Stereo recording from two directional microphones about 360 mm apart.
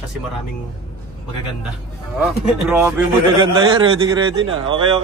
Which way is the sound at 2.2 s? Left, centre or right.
Centre.